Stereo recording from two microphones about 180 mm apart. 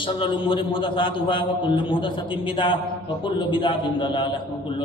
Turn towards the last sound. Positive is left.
turn(degrees=25)  # may be behind; listen again after turning